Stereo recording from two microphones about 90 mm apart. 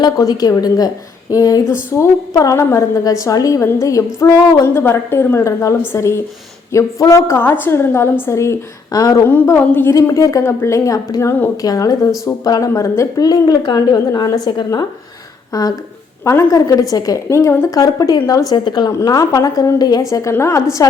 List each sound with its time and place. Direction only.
0.0 s a woman's voice: 45° left (ahead or behind)
1.7 s a woman's voice: 30° left (ahead or behind)
4.6 s a woman's voice: 25° left (ahead or behind)
8.9 s a woman's voice: 45° left (ahead or behind)
9.2 s a woman's voice: 25° left (ahead or behind)
10.1 s a woman's voice: 35° left (ahead or behind)
17.7 s a woman's voice: 40° left (ahead or behind)
18.5 s a woman's voice: 55° left (ahead or behind)
18.9 s a woman's voice: 40° left (ahead or behind)